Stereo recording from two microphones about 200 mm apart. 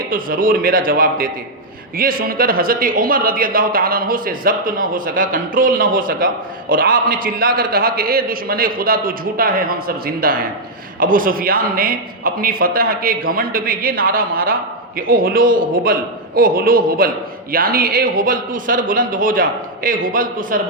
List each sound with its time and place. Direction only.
0.1 s speech: 45° right (ahead or behind)